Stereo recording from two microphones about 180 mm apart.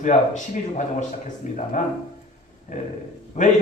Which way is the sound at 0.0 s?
45° left (ahead or behind).